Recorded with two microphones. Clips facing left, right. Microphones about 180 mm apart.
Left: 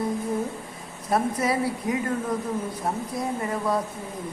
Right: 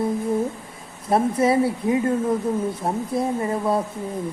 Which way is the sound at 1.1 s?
25° right (ahead or behind).